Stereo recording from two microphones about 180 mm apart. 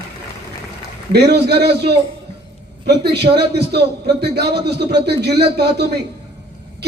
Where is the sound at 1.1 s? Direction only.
65° right (ahead or behind).